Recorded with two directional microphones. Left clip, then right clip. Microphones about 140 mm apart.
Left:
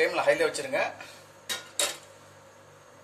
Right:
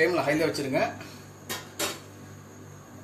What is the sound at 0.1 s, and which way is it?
Speech, 70° left (ahead or behind).